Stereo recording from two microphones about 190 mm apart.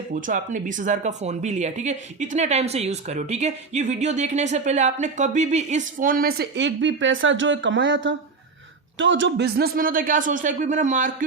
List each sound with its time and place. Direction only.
0.1 s speech: 45° right (ahead or behind)